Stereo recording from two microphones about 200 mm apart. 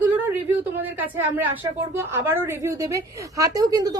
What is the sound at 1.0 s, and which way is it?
A woman's voice, 10° right (ahead or behind).